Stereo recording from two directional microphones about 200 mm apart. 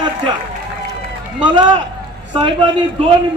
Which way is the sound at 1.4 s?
25° right (ahead or behind).